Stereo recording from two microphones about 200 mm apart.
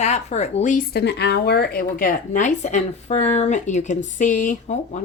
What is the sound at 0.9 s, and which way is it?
A woman's voice, 55° left (ahead or behind).